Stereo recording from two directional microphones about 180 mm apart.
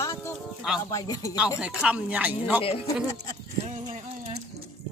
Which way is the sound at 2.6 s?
30° left (ahead or behind).